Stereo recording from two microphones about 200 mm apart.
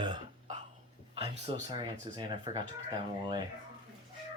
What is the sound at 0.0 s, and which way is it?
Burping, 20° right (ahead or behind).